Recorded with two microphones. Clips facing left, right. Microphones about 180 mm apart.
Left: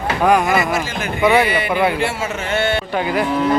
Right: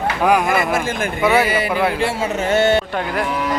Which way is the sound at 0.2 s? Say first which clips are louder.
Left 2 dB; 5° right (ahead or behind).